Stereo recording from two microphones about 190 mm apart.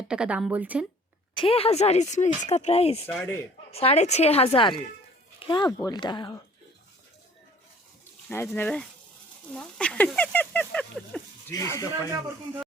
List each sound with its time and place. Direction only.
0.1 s a woman's voice: 5° right (ahead or behind)
1.4 s speech: 30° left (ahead or behind)
3.1 s speech: 10° left (ahead or behind)
3.7 s speech: 30° left (ahead or behind)
8.3 s speech: 10° left (ahead or behind)
11.5 s speech: 15° left (ahead or behind)